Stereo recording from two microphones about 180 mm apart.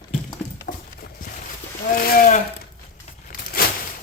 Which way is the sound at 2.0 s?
50° left (ahead or behind).